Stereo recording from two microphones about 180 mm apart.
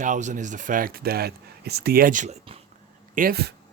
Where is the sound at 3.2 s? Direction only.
60° right (ahead or behind).